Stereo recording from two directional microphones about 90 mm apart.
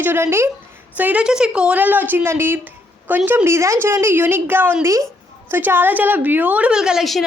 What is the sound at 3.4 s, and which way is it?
A woman's voice, 35° right (ahead or behind).